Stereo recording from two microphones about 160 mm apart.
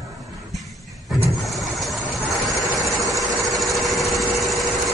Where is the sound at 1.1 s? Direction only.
Centre (ahead or behind).